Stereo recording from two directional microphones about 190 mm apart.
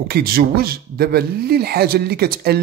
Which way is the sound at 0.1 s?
55° right (ahead or behind).